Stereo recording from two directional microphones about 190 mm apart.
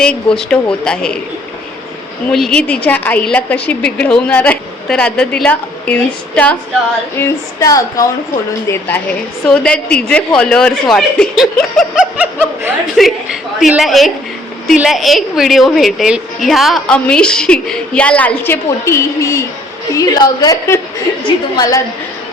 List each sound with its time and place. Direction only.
0.0 s a woman's voice: 5° left (ahead or behind)
2.2 s a woman's voice: 5° left (ahead or behind)
7.2 s a woman's voice: 15° left (ahead or behind)